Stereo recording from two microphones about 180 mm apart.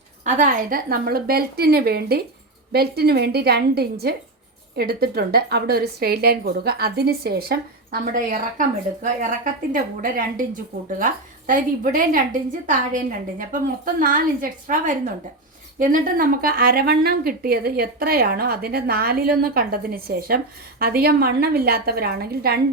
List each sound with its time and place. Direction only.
0.3 s a woman's voice: 45° right (ahead or behind)
15.8 s a woman's voice: 50° right (ahead or behind)